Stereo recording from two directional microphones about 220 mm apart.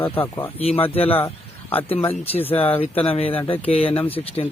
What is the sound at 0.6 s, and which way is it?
Speech, 25° left (ahead or behind).